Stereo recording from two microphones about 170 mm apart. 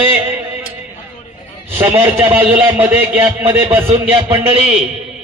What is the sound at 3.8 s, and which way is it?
Speech, 35° right (ahead or behind).